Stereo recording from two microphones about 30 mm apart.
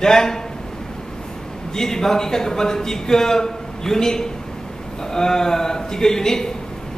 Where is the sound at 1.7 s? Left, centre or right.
Centre.